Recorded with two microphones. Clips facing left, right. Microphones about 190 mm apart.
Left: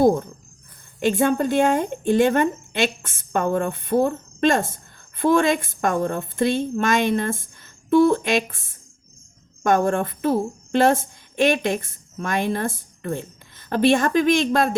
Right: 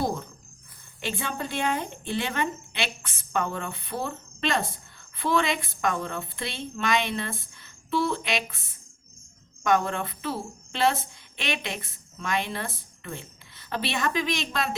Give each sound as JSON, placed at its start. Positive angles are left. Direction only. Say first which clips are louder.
{"t": 0.0, "sound": "speech", "louder": "left 12 dB", "side_deg": 50}
{"t": 9.6, "sound": "speech", "louder": "left 6 dB", "side_deg": 50}